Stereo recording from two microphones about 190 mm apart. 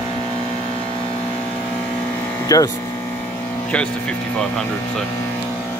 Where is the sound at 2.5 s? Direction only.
20° left (ahead or behind).